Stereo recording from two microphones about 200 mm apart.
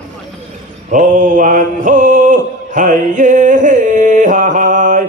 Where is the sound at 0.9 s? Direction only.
40° right (ahead or behind).